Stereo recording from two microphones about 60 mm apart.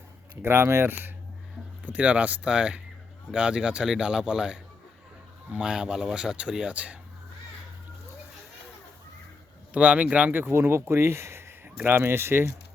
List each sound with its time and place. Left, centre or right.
0.4 s speech: right
1.8 s speech: right
9.7 s speech: right
10.4 s speech: right